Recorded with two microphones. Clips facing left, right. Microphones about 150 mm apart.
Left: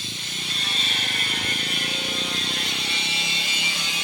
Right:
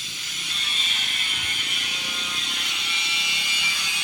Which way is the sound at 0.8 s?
45° left (ahead or behind).